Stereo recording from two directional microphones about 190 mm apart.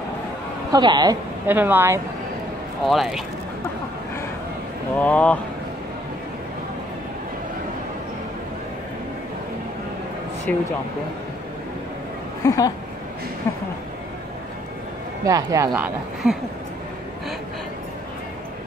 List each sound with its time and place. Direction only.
0.7 s a woman's voice: 20° right (ahead or behind)
1.5 s speech: 10° right (ahead or behind)
2.8 s speech: centre (ahead or behind)
5.0 s speech: 5° left (ahead or behind)
10.5 s speech: 5° left (ahead or behind)
12.4 s speech: 20° left (ahead or behind)
15.2 s speech: 15° right (ahead or behind)